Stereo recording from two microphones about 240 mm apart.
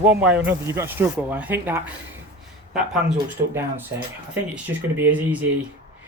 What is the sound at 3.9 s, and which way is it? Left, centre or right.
Speech, right.